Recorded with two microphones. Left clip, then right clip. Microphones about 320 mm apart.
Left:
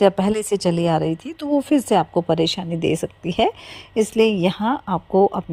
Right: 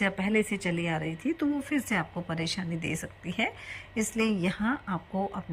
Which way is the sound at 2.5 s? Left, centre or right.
Left.